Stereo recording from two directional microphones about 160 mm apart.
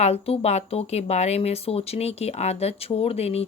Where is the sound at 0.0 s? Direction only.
40° left (ahead or behind).